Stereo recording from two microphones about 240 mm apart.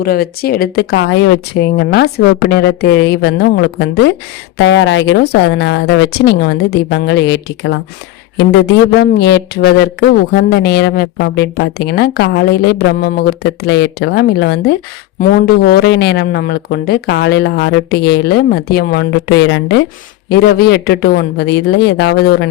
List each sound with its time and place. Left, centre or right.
0.0 s speech: left
9.0 s speech: left